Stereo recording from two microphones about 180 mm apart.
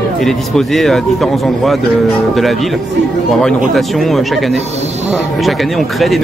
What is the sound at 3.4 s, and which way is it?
Speech, centre (ahead or behind).